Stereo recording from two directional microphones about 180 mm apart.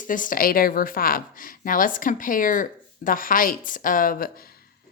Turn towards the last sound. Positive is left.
turn(degrees=55)  # may be behind; listen again after turning